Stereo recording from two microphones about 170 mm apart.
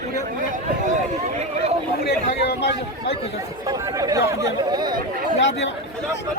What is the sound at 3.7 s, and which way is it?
Speech, 20° right (ahead or behind).